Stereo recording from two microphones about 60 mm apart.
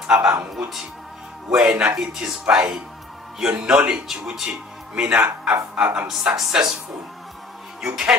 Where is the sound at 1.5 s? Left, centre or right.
Centre.